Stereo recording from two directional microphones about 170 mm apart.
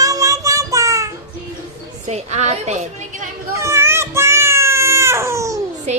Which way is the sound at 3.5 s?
15° right (ahead or behind).